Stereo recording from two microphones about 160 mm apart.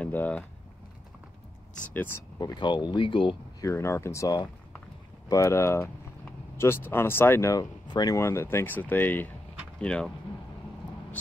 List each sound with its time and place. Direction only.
0.0 s speech: 10° left (ahead or behind)
2.3 s speech: 25° left (ahead or behind)
3.6 s speech: 15° left (ahead or behind)